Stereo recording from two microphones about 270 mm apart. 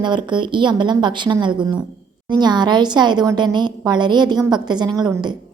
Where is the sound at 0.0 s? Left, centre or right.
Centre.